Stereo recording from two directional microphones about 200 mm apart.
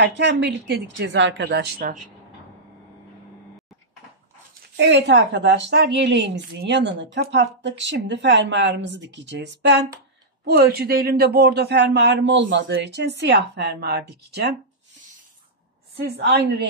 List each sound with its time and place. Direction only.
0.0 s a woman's voice: 60° right (ahead or behind)
4.7 s a woman's voice: 60° right (ahead or behind)
16.1 s a woman's voice: 55° right (ahead or behind)